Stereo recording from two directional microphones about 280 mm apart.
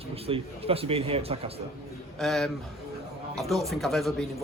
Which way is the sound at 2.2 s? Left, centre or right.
Centre.